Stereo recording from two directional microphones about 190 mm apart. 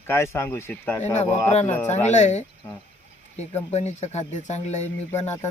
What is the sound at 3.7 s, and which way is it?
Speech, 35° left (ahead or behind).